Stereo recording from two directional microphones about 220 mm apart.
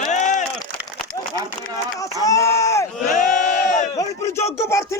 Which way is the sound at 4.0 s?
10° left (ahead or behind).